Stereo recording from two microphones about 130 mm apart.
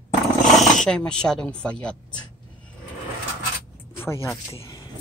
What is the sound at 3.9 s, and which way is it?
Speech, 20° left (ahead or behind).